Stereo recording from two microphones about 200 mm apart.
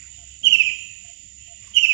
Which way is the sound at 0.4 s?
65° right (ahead or behind).